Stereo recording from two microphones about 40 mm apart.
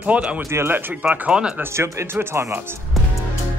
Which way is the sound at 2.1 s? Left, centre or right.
Right.